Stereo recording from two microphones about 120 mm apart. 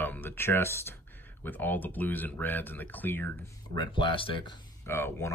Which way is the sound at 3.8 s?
40° left (ahead or behind).